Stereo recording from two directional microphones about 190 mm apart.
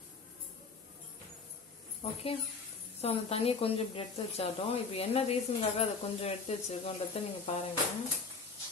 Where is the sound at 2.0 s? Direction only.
30° left (ahead or behind).